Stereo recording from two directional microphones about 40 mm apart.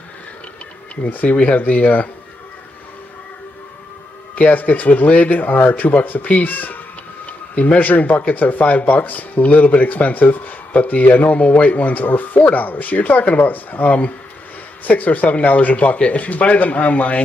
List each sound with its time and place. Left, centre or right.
1.0 s speech: left
4.4 s speech: left